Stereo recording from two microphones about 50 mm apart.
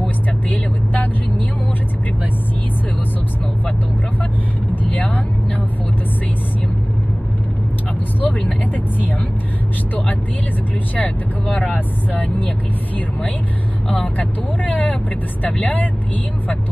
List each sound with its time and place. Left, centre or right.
0.5 s vehicle: left
4.8 s vehicle: left
8.2 s vehicle: left
11.0 s speech: left
13.8 s vehicle: left
15.5 s speech: left